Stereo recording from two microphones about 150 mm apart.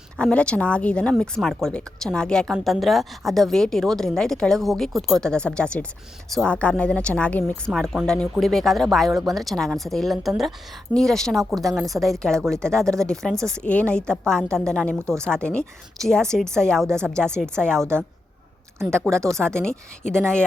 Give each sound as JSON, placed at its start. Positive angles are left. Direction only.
{"t": 0.2, "sound": "speech", "side_deg": 5}
{"t": 16.8, "sound": "a woman's voice", "side_deg": -15}
{"t": 17.1, "sound": "speech", "side_deg": 5}
{"t": 19.5, "sound": "speech", "side_deg": 5}